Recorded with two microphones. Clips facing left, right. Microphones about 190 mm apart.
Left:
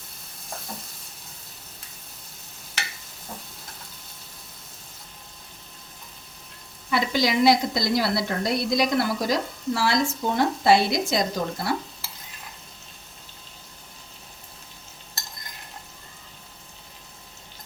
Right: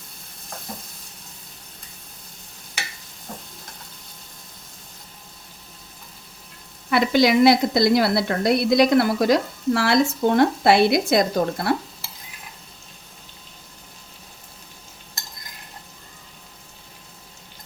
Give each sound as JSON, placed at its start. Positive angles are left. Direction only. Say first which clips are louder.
{"t": 6.9, "sound": "a woman's voice", "louder": "right 6 dB", "side_deg": -60}